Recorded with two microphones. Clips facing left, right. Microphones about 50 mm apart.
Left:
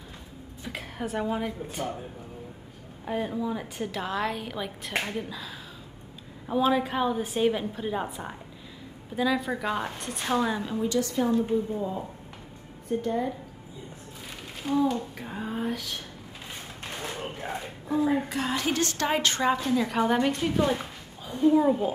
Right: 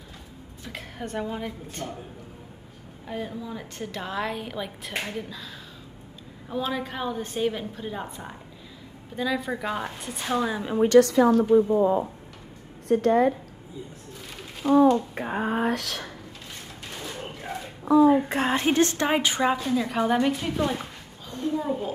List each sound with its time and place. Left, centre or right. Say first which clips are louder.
0.7 s a woman's voice: left 2 dB; centre
3.1 s a woman's voice: left 4 dB; centre
6.5 s a woman's voice: left 5 dB; centre
11.0 s a woman's voice: right 9 dB; right
12.8 s a woman's voice: right 8 dB; right
14.7 s a woman's voice: right 8 dB; right
15.1 s speech: right 7 dB; right
15.6 s a woman's voice: right 5 dB; right
18.3 s a woman's voice: right 5 dB; right
19.0 s a woman's voice: right 2 dB; centre
21.3 s a woman's voice: left 6 dB; centre